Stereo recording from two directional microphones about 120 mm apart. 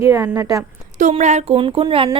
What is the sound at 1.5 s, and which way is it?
Speech, 50° right (ahead or behind).